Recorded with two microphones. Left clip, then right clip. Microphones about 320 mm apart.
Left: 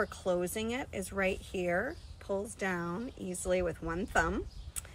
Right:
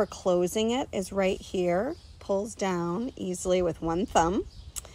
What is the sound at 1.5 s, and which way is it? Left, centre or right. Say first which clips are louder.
Speech: right 7 dB; right.